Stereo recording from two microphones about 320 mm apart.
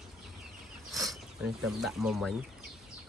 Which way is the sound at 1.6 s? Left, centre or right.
Centre.